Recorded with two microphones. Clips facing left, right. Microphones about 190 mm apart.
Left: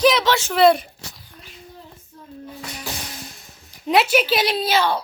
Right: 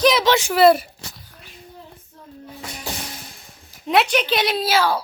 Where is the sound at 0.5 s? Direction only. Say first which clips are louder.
Even; 5° right (ahead or behind).